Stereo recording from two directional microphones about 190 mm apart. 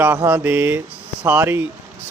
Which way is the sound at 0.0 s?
10° right (ahead or behind).